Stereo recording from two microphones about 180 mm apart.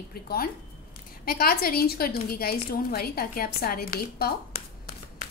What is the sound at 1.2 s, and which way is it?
A woman's voice, 55° left (ahead or behind).